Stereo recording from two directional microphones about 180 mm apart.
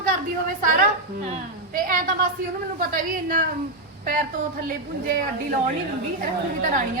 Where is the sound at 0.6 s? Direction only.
50° right (ahead or behind).